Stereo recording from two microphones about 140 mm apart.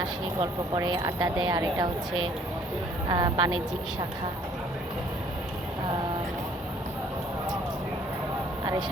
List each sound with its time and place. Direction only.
0.0 s speech: 30° right (ahead or behind)
3.1 s a woman's voice: 30° right (ahead or behind)